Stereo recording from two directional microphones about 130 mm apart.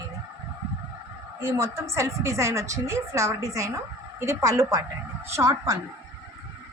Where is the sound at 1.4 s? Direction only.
20° right (ahead or behind).